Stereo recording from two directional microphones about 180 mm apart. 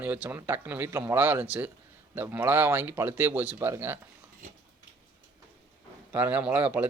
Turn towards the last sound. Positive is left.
turn(degrees=-10)  # may be behind; listen again after turning